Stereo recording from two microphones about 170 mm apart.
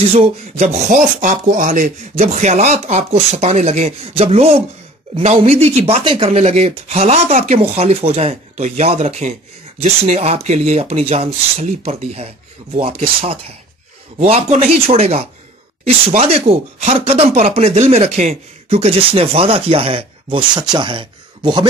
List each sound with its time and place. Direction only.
0.1 s speech: 40° right (ahead or behind)